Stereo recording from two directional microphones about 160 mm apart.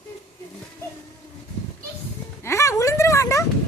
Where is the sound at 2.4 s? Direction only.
20° left (ahead or behind).